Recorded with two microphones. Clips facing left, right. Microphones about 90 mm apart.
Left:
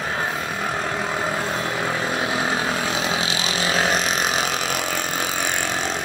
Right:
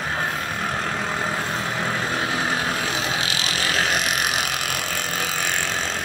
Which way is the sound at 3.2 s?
25° left (ahead or behind).